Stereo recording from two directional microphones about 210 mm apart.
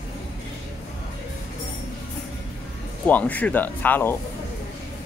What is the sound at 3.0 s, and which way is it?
Speech, 5° left (ahead or behind).